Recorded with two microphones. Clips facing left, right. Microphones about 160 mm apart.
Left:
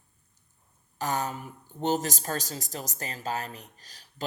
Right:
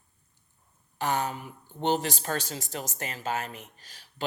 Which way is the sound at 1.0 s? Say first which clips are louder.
Right 1 dB; 40° left (ahead or behind).